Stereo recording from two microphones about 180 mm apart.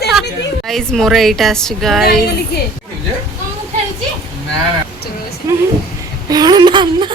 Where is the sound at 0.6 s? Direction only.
Centre (ahead or behind).